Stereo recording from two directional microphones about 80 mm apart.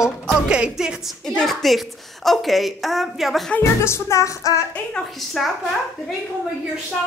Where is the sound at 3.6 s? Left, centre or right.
Left.